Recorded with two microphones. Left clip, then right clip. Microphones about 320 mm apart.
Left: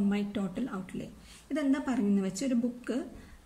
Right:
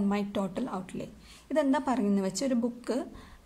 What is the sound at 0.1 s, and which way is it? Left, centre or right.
A woman's voice, centre.